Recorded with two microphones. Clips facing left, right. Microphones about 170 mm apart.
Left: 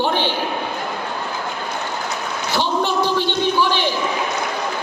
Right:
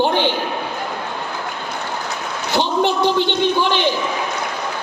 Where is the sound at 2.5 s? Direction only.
20° right (ahead or behind).